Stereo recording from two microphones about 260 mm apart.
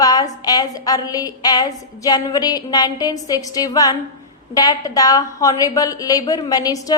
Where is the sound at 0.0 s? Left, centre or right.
Centre.